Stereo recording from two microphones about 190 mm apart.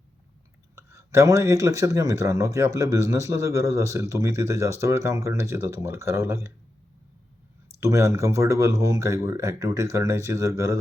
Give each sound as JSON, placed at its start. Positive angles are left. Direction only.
{"t": 0.8, "sound": "speech", "side_deg": -15}
{"t": 7.8, "sound": "speech", "side_deg": -15}